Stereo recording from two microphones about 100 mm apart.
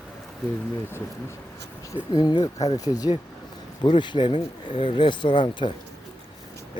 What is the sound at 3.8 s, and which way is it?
Speech, 50° left (ahead or behind).